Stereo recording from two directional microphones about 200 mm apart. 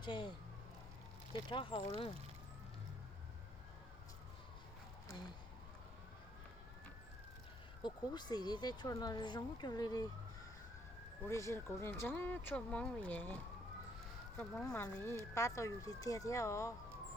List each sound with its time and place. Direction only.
0.0 s speech: 25° left (ahead or behind)
1.3 s speech: 25° left (ahead or behind)
7.8 s speech: 20° left (ahead or behind)
11.3 s speech: 15° left (ahead or behind)